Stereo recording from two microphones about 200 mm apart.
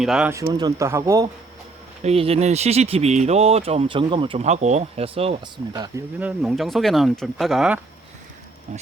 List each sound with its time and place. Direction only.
0.0 s speech: 5° right (ahead or behind)
0.3 s speech: 20° right (ahead or behind)
2.0 s speech: 30° right (ahead or behind)
6.1 s speech: 5° right (ahead or behind)